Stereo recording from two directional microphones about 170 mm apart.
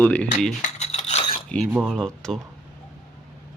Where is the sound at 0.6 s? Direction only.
40° left (ahead or behind).